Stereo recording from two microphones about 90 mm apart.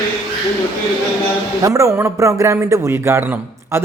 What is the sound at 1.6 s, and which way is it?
A man's voice, 35° right (ahead or behind).